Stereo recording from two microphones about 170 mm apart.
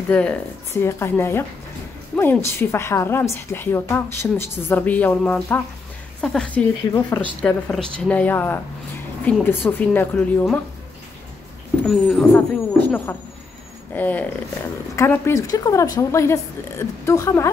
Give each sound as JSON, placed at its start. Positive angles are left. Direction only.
{"t": 0.1, "sound": "a woman's voice", "side_deg": 5}
{"t": 11.9, "sound": "a woman's voice", "side_deg": 0}